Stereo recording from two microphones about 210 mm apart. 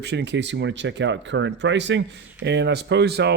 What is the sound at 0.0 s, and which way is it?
Speech, 55° right (ahead or behind).